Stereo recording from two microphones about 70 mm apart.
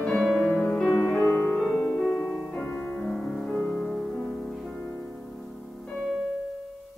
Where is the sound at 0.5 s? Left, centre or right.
Left.